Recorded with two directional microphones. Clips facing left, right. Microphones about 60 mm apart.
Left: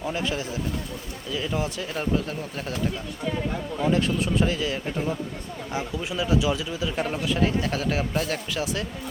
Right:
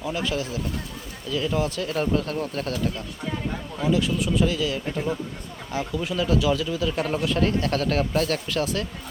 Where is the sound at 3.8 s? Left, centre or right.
Left.